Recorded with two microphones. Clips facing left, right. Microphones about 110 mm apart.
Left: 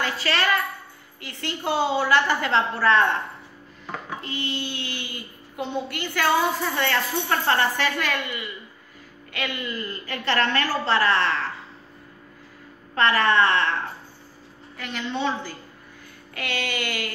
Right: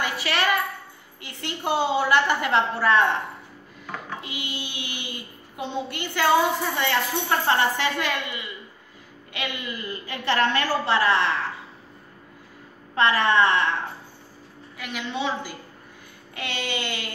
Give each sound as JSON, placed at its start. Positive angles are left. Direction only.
{"t": 0.0, "sound": "a woman's voice", "side_deg": -15}
{"t": 12.9, "sound": "a woman's voice", "side_deg": -20}
{"t": 14.8, "sound": "a woman's voice", "side_deg": -5}
{"t": 16.3, "sound": "speech", "side_deg": -20}